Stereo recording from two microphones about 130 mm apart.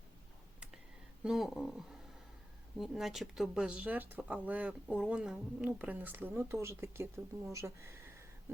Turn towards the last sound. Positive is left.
turn(degrees=-20)  # may be behind; listen again after turning